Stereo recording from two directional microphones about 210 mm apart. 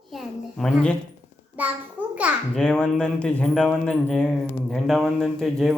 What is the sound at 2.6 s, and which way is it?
A man's voice, 5° left (ahead or behind).